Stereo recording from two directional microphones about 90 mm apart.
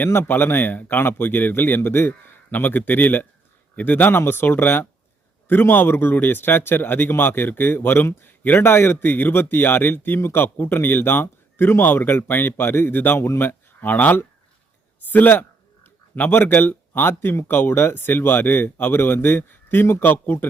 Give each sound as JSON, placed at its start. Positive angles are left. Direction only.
{"t": 0.0, "sound": "speech", "side_deg": 25}